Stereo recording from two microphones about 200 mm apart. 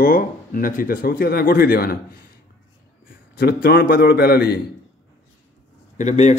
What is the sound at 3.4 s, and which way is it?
Speech, 50° left (ahead or behind).